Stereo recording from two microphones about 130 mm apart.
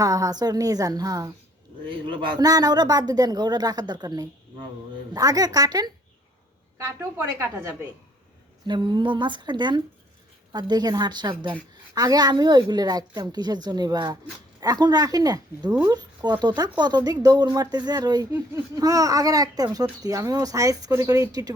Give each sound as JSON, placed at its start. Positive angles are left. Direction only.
{"t": 0.0, "sound": "speech", "side_deg": -30}
{"t": 1.9, "sound": "speech", "side_deg": -40}
{"t": 8.6, "sound": "speech", "side_deg": -35}